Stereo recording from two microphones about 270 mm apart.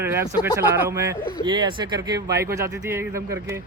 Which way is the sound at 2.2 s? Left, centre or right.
Right.